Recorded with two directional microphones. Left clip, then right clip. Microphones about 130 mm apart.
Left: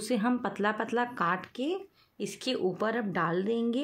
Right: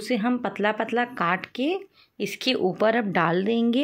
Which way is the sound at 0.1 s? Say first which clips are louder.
Right 4 dB; 15° right (ahead or behind).